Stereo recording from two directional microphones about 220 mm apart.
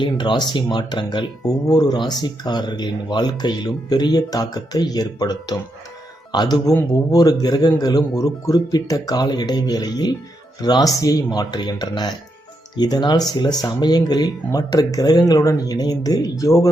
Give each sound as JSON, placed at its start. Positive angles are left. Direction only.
{"t": 0.0, "sound": "speech", "side_deg": 20}